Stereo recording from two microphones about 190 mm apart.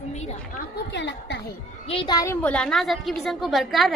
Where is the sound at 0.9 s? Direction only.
65° left (ahead or behind).